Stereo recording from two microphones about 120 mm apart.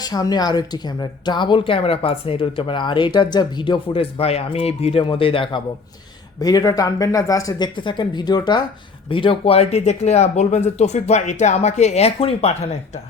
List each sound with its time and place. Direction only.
0.0 s speech: 35° left (ahead or behind)
6.4 s speech: 30° left (ahead or behind)
7.8 s speech: 40° left (ahead or behind)
9.0 s speech: 45° left (ahead or behind)